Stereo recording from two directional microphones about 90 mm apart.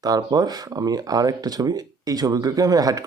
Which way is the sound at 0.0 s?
45° right (ahead or behind).